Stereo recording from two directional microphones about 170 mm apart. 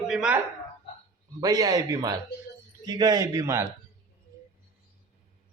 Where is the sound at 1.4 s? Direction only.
20° right (ahead or behind).